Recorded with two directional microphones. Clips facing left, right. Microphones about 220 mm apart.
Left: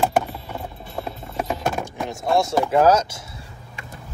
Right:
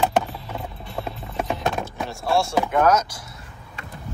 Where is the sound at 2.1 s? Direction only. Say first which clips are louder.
Left 2 dB; 20° left (ahead or behind).